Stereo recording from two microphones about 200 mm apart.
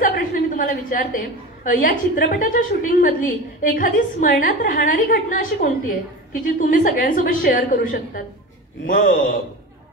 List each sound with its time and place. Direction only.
0.0 s a woman's voice: 45° left (ahead or behind)